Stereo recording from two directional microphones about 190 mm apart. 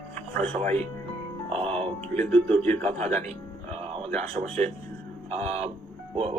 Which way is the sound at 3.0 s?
35° right (ahead or behind).